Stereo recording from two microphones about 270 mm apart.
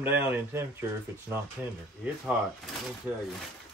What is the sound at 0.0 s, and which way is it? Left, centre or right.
Speech, centre.